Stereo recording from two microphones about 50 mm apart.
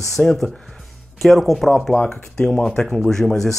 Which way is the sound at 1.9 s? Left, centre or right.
Centre.